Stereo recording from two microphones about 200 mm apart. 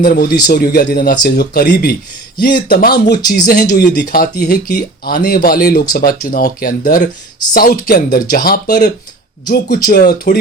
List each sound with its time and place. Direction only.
0.0 s speech: 45° left (ahead or behind)
3.2 s speech: 20° left (ahead or behind)
3.4 s speech: 50° left (ahead or behind)